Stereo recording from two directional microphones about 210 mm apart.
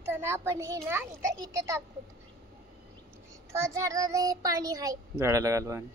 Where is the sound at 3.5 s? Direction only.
15° right (ahead or behind).